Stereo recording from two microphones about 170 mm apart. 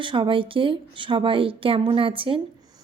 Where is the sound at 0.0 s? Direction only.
30° right (ahead or behind).